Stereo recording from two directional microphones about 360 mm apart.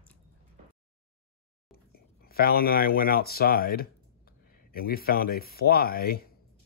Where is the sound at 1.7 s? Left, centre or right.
Left.